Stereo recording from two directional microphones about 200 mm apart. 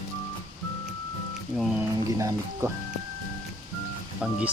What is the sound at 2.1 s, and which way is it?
Speech, 15° right (ahead or behind).